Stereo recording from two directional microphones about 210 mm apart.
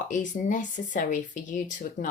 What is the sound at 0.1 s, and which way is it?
Speech, 35° left (ahead or behind).